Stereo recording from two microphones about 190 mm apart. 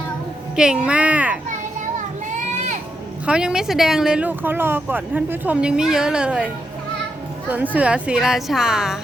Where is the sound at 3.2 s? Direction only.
5° right (ahead or behind).